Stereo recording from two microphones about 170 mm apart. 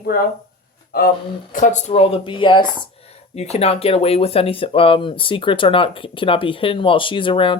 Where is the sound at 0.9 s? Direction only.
60° left (ahead or behind).